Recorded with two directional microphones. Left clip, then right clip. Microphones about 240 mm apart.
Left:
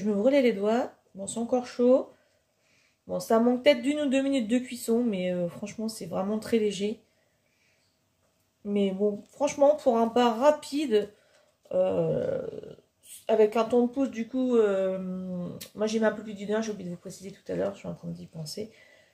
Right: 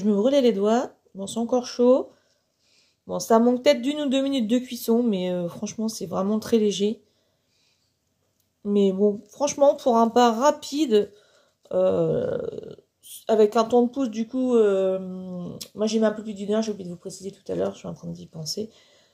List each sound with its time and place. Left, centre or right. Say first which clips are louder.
0.0 s speech: right 3 dB; right
3.1 s speech: right 5 dB; right
8.6 s speech: right 6 dB; right